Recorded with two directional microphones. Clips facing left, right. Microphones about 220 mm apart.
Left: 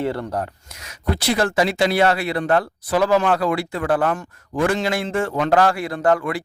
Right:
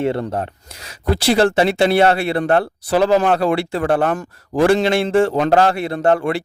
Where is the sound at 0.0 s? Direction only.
25° right (ahead or behind).